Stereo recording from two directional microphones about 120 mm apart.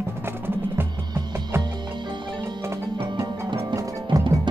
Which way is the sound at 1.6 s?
40° right (ahead or behind).